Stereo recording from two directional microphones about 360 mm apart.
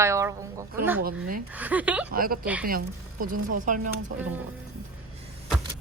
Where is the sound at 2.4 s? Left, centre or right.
Centre.